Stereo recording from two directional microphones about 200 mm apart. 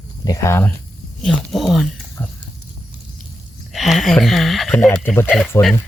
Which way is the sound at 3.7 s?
Centre (ahead or behind).